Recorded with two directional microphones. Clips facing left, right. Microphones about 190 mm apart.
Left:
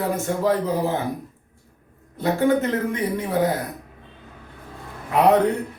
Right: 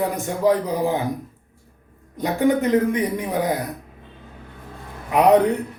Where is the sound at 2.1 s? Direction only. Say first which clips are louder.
Even; 15° right (ahead or behind).